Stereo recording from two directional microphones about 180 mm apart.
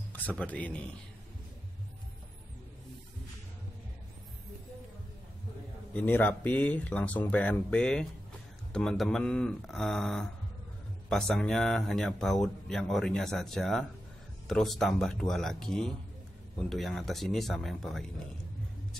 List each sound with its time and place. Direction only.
0.1 s speech: 10° left (ahead or behind)
5.9 s speech: 10° left (ahead or behind)